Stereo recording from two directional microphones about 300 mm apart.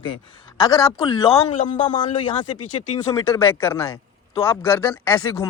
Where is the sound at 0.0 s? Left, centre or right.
Centre.